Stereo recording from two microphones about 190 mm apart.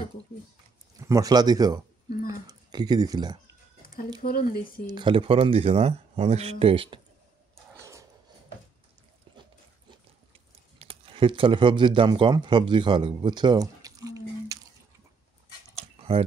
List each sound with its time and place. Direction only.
0.9 s speech: 15° right (ahead or behind)
2.2 s a sound: 20° right (ahead or behind)
4.2 s speech: 50° left (ahead or behind)
4.8 s speech: 25° right (ahead or behind)
7.8 s dog: 15° right (ahead or behind)
10.8 s speech: 30° right (ahead or behind)
16.0 s a sound: 30° right (ahead or behind)